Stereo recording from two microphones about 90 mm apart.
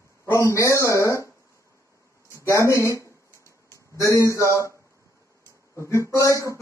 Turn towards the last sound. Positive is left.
turn(degrees=35)  # may be behind; listen again after turning